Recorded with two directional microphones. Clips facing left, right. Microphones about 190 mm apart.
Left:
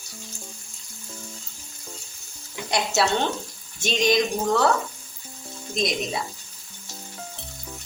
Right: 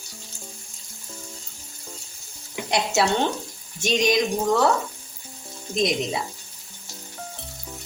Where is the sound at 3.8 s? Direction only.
15° right (ahead or behind).